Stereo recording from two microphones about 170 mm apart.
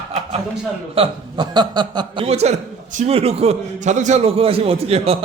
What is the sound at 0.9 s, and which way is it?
A man's voice, 30° right (ahead or behind).